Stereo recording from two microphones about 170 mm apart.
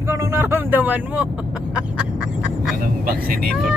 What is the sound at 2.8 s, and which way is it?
Speech, 60° right (ahead or behind).